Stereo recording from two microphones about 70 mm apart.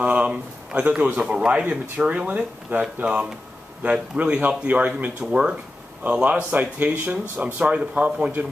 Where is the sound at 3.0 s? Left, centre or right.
Centre.